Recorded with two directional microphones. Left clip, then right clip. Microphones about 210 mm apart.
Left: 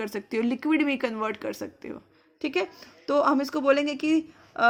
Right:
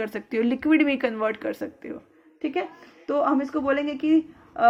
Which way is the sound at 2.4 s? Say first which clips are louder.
Even; 60° left (ahead or behind).